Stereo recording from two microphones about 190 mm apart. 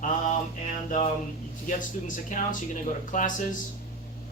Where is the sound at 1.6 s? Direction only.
45° left (ahead or behind).